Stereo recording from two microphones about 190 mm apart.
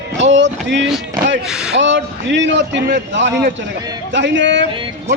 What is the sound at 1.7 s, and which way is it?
A man's voice, 75° right (ahead or behind).